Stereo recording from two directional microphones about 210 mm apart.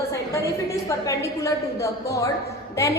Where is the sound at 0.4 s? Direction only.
15° left (ahead or behind).